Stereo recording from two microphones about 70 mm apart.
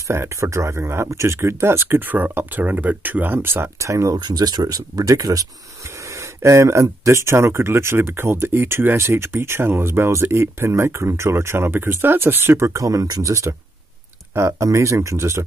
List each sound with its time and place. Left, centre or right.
0.1 s speech: right
3.8 s speech: right
4.2 s speech: right
6.1 s speech: right
12.7 s speech: right